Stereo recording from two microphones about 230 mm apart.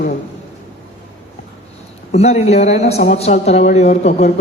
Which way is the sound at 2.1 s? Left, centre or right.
Left.